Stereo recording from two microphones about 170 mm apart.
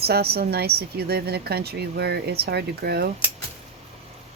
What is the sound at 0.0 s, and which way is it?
Speech, 70° right (ahead or behind).